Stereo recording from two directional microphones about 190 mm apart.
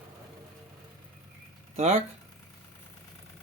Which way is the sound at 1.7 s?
35° right (ahead or behind).